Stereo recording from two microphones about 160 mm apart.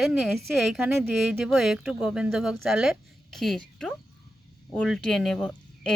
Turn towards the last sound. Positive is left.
turn(degrees=5)  # may be behind; listen again after turning